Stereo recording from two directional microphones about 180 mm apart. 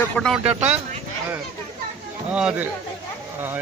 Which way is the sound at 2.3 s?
5° right (ahead or behind).